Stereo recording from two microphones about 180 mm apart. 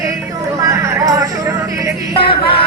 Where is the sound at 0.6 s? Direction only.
15° right (ahead or behind).